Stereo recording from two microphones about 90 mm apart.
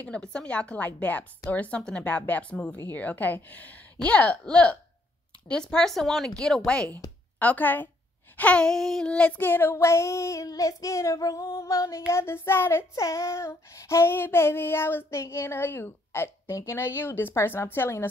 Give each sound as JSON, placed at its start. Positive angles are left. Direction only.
{"t": 0.0, "sound": "speech", "side_deg": 15}
{"t": 2.9, "sound": "child singing", "side_deg": 20}
{"t": 4.0, "sound": "speech", "side_deg": 15}
{"t": 7.3, "sound": "child singing", "side_deg": 20}